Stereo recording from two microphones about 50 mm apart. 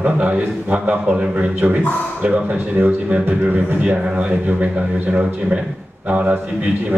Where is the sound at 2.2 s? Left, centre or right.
Right.